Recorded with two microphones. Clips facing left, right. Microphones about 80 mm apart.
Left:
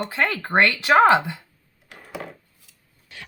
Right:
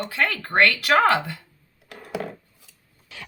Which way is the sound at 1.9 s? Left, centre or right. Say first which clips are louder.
Right 4 dB; right.